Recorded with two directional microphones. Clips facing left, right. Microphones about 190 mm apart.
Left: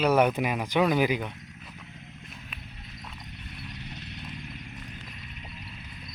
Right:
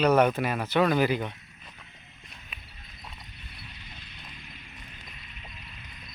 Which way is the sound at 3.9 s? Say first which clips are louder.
Left 8 dB; 70° left (ahead or behind).